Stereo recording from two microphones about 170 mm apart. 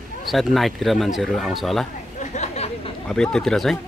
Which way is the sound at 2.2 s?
40° left (ahead or behind).